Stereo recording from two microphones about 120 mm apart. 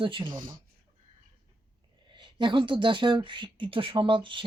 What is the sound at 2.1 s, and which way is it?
Speech, 40° right (ahead or behind).